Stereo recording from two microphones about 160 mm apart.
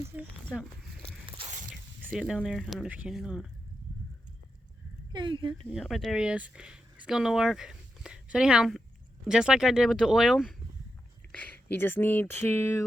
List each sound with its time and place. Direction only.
2.1 s speech: centre (ahead or behind)
5.1 s speech: 25° right (ahead or behind)
5.6 s speech: centre (ahead or behind)
11.3 s speech: 10° left (ahead or behind)